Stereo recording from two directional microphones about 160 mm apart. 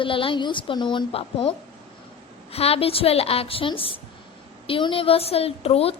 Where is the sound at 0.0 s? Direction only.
35° left (ahead or behind).